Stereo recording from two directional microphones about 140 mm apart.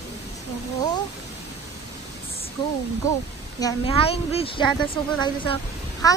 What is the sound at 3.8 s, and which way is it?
A child's voice, 40° left (ahead or behind).